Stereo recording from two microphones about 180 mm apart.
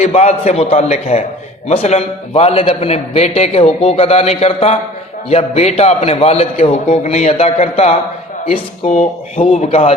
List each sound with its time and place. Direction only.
0.0 s a man's voice: 35° left (ahead or behind)